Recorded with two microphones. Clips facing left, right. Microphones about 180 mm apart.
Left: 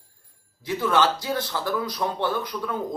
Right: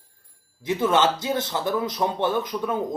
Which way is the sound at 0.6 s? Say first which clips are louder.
Right 2 dB; 20° right (ahead or behind).